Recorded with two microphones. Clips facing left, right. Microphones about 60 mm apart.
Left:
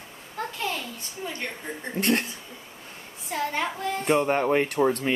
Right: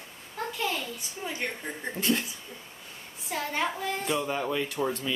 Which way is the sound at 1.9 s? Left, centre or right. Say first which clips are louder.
Left 4 dB; left.